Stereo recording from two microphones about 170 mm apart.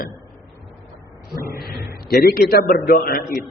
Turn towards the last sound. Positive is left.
turn(degrees=55)  # may be behind; listen again after turning